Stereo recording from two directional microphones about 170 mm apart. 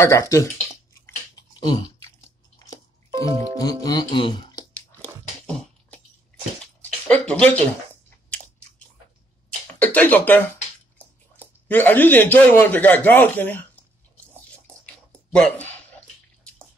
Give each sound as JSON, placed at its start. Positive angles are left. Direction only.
{"t": 0.0, "sound": "speech", "side_deg": 15}
{"t": 1.0, "sound": "a sound", "side_deg": 25}
{"t": 3.5, "sound": "speech", "side_deg": 25}
{"t": 5.5, "sound": "beatboxing", "side_deg": 5}
{"t": 6.6, "sound": "a sound", "side_deg": 5}
{"t": 9.8, "sound": "speech", "side_deg": 10}
{"t": 15.3, "sound": "speech", "side_deg": 5}